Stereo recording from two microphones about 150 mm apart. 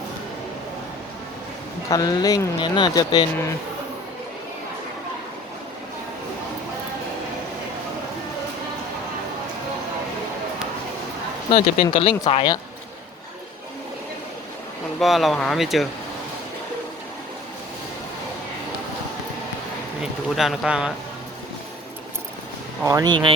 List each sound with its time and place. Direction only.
1.9 s speech: 25° left (ahead or behind)
11.5 s speech: 40° left (ahead or behind)
14.9 s speech: centre (ahead or behind)
20.0 s speech: centre (ahead or behind)
22.8 s speech: 20° right (ahead or behind)